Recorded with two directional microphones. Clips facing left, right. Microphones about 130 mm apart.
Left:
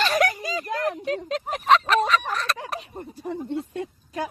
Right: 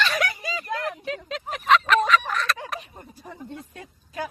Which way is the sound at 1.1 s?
40° left (ahead or behind).